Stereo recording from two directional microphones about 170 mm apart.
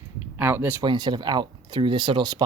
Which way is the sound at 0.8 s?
25° right (ahead or behind).